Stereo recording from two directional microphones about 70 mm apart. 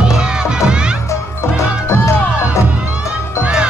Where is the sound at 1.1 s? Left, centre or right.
Left.